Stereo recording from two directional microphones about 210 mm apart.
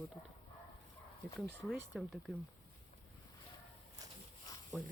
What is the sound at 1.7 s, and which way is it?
Speech, centre (ahead or behind).